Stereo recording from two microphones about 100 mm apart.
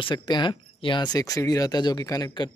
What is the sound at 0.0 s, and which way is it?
Speech, 50° left (ahead or behind).